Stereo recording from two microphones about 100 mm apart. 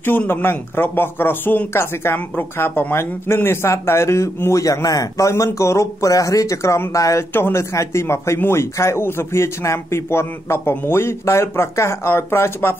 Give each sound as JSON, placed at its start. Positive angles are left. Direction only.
{"t": 0.0, "sound": "speech", "side_deg": 20}